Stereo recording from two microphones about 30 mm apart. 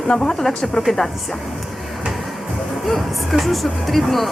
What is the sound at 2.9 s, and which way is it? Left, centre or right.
Speech, centre.